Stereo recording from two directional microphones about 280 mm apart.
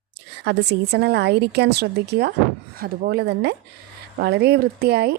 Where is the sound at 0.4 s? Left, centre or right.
Right.